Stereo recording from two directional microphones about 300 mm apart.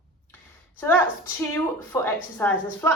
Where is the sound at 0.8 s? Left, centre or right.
Centre.